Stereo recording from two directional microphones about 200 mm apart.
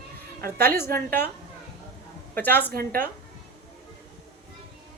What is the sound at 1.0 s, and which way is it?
Speech, 10° left (ahead or behind).